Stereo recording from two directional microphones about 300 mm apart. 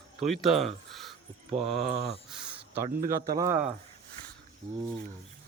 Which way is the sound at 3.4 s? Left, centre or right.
Centre.